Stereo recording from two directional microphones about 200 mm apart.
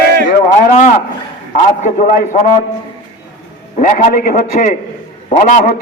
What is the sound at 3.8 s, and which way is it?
A man's voice, 45° left (ahead or behind).